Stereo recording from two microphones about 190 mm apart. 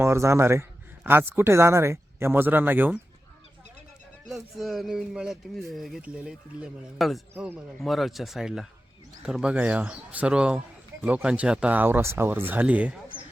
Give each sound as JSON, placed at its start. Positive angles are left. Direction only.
{"t": 0.0, "sound": "a man's voice", "side_deg": -15}
{"t": 4.3, "sound": "speech", "side_deg": 0}